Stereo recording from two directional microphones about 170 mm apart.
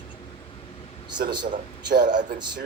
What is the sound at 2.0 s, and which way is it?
Speech, 50° right (ahead or behind).